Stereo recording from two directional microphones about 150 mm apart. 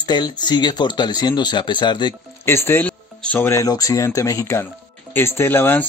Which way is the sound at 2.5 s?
15° left (ahead or behind).